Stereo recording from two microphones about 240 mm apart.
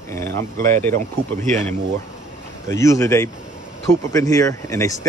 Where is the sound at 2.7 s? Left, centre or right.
Centre.